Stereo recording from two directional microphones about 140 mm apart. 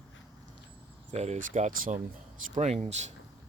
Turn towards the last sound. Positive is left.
turn(degrees=-55)  # may be behind; listen again after turning